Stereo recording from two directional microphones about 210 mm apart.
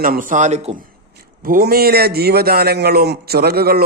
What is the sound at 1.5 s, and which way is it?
A man's voice, 45° right (ahead or behind).